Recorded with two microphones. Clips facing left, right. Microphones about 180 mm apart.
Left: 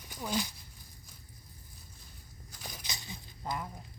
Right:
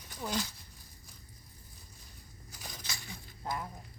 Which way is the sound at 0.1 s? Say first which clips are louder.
Left 1 dB; 5° left (ahead or behind).